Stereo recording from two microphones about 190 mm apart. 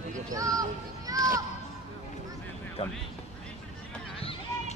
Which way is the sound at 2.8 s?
30° left (ahead or behind).